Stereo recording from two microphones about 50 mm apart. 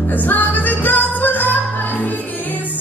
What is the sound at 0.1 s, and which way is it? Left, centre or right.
Music, left.